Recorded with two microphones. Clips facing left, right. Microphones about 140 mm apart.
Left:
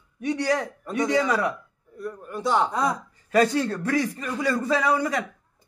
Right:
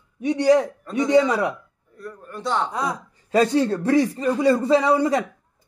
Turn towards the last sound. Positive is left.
turn(degrees=-25)  # may be behind; listen again after turning